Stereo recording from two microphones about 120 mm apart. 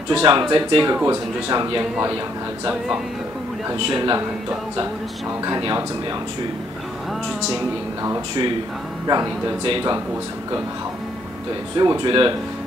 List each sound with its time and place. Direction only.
0.1 s speech: 45° right (ahead or behind)
1.8 s a man's voice: 25° right (ahead or behind)
3.7 s speech: 40° right (ahead or behind)
5.4 s speech: 35° right (ahead or behind)
8.0 s speech: 30° right (ahead or behind)
9.7 s speech: 50° right (ahead or behind)
11.7 s speech: 40° right (ahead or behind)